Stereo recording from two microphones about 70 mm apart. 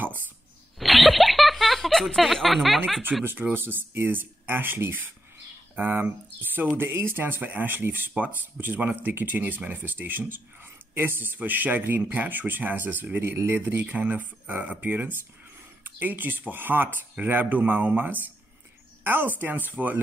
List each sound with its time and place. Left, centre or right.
0.7 s a sound: centre
3.1 s speech: centre
3.5 s speech: right